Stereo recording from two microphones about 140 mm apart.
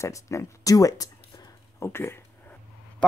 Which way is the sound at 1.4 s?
25° left (ahead or behind).